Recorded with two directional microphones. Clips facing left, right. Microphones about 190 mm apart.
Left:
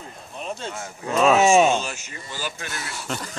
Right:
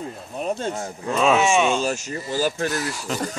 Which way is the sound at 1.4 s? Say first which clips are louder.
Left 3 dB; 40° left (ahead or behind).